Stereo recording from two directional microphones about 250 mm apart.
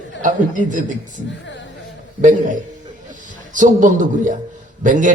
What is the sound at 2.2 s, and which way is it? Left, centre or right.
A man's voice, right.